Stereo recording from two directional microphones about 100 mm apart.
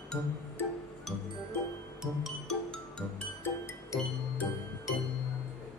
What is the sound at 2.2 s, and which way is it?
Music, centre (ahead or behind).